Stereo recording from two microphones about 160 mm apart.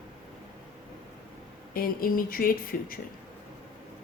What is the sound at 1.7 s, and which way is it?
Speech, 65° left (ahead or behind).